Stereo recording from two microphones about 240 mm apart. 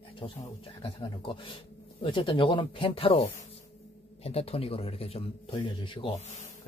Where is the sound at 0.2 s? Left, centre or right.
Left.